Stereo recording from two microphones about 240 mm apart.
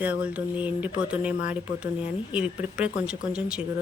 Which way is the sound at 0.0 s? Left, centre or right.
Centre.